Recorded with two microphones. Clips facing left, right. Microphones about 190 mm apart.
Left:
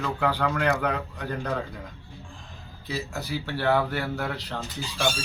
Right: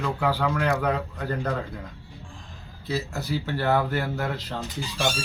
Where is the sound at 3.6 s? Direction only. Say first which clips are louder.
Even; 10° right (ahead or behind).